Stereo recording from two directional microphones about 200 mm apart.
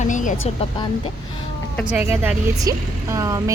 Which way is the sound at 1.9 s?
10° right (ahead or behind).